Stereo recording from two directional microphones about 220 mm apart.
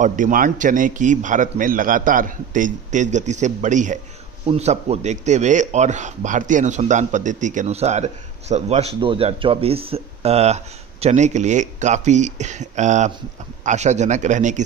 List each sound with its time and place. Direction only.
0.0 s a man's voice: 35° right (ahead or behind)